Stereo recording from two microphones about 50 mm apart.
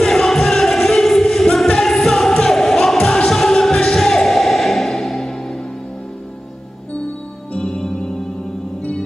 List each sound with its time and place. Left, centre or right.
0.0 s music: centre
7.5 s music: centre